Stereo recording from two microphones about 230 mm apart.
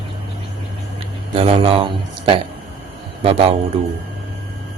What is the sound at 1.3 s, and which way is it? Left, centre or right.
Mantra, right.